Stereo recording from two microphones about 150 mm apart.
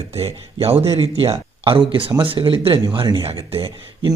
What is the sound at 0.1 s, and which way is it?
Speech, 40° right (ahead or behind).